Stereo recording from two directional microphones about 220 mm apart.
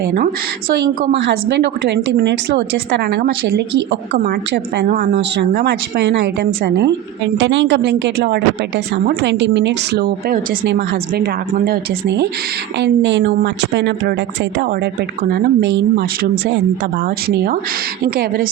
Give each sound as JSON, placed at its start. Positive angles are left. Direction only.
{"t": 0.8, "sound": "a woman's voice", "side_deg": -50}
{"t": 15.2, "sound": "a woman's voice", "side_deg": -50}